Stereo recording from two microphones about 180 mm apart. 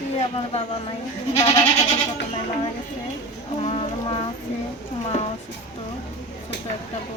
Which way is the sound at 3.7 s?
30° left (ahead or behind).